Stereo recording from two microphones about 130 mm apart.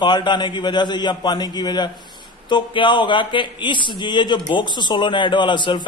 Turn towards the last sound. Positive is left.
turn(degrees=35)  # may be behind; listen again after turning